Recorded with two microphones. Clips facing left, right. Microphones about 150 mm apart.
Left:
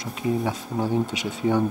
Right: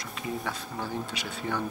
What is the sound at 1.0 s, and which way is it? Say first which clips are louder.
Speech: left 9 dB; centre (ahead or behind).